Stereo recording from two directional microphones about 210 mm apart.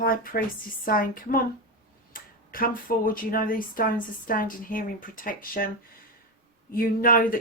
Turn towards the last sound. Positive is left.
turn(degrees=40)  # may be behind; listen again after turning